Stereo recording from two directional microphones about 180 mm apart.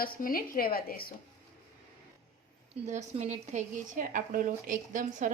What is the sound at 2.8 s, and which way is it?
Speech, 40° right (ahead or behind).